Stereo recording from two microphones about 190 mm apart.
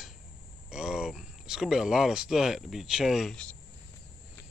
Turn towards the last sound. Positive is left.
turn(degrees=5)  # may be behind; listen again after turning